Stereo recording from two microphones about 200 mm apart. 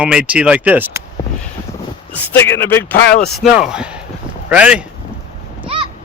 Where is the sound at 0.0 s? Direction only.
5° right (ahead or behind).